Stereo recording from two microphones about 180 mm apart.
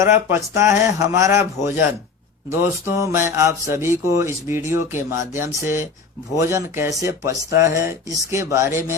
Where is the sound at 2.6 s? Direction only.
15° right (ahead or behind).